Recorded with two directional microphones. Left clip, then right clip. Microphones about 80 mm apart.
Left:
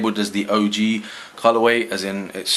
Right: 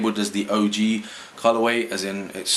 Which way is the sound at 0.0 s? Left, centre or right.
Left.